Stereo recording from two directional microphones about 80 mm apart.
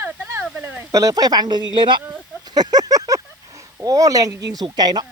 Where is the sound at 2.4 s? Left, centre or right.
Right.